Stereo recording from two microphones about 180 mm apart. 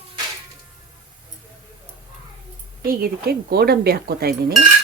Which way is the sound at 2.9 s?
55° right (ahead or behind).